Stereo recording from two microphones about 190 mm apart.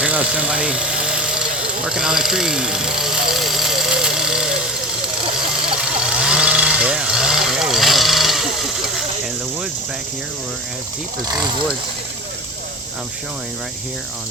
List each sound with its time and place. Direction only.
0.0 s engine: 5° right (ahead or behind)
5.6 s chainsaw: 5° right (ahead or behind)
11.3 s speech: 20° right (ahead or behind)